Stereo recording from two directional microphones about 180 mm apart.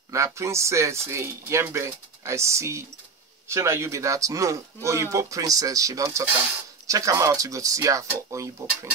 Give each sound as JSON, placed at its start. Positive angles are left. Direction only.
{"t": 0.1, "sound": "speech", "side_deg": -15}